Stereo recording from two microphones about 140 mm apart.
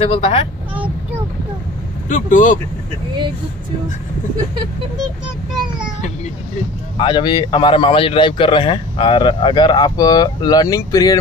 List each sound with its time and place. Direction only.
0.0 s a man's voice: 40° left (ahead or behind)
2.0 s speech: 65° left (ahead or behind)
7.0 s a man's voice: 35° left (ahead or behind)